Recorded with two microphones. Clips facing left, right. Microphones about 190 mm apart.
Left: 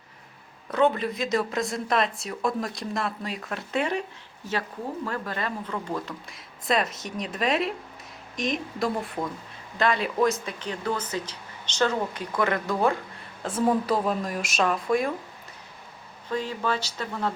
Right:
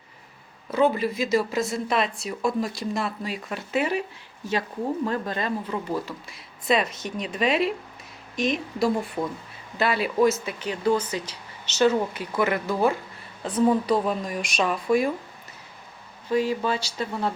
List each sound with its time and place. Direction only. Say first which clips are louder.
0.7 s speech: right 1 dB; 5° right (ahead or behind)
5.0 s speech: right 4 dB; 20° right (ahead or behind)
5.9 s speech: right 3 dB; 5° right (ahead or behind)
16.3 s speech: right 4 dB; 10° right (ahead or behind)